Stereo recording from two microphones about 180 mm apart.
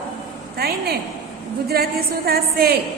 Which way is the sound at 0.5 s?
60° right (ahead or behind).